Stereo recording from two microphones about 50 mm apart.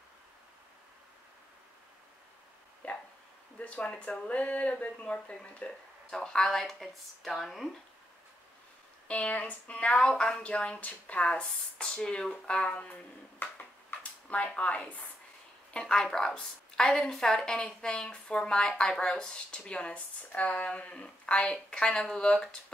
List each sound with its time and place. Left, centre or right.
2.8 s a sound: left
3.5 s speech: left
6.0 s a woman's voice: centre
9.0 s speech: left
12.7 s speech: left
15.7 s a woman's voice: centre